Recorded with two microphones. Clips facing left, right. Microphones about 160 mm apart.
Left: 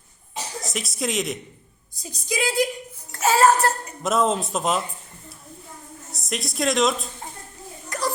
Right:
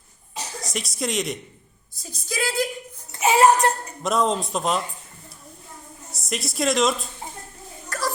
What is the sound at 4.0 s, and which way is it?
Speech, centre (ahead or behind).